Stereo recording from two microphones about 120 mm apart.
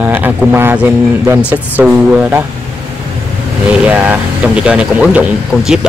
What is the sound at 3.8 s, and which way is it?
A man's voice, 10° right (ahead or behind).